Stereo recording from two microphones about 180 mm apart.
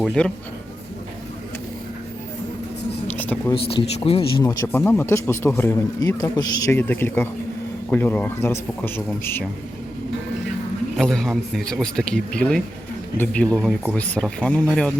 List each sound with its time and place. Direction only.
0.0 s speech: 5° left (ahead or behind)
3.2 s a sound: 10° left (ahead or behind)
3.9 s speech: 30° left (ahead or behind)
4.4 s speech: 10° left (ahead or behind)
10.9 s speech: 5° left (ahead or behind)